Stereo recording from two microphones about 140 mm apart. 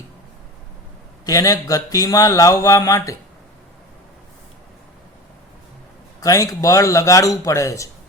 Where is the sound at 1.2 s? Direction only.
25° left (ahead or behind).